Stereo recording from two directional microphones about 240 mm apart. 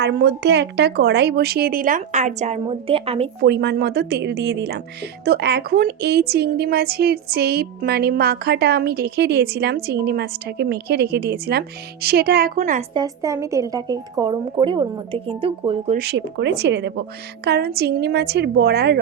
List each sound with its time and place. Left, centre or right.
0.0 s a woman's voice: right
3.4 s a woman's voice: right
12.9 s a woman's voice: centre
16.0 s a woman's voice: right